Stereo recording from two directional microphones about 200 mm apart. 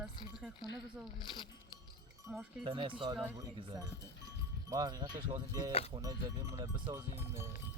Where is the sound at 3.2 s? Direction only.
10° right (ahead or behind).